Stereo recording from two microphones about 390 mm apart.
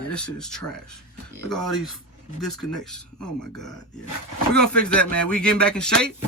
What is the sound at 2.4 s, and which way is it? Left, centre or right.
Speech, centre.